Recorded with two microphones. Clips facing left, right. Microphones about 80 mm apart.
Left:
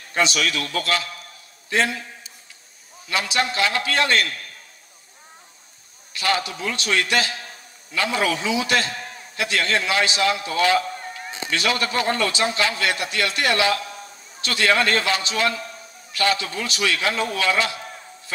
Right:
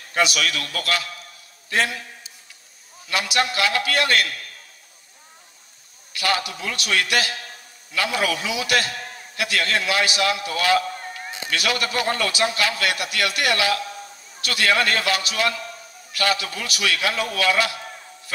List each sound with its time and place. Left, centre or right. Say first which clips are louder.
0.1 s a man's voice: even; left
3.1 s a man's voice: even; left
6.1 s a man's voice: left 1 dB; left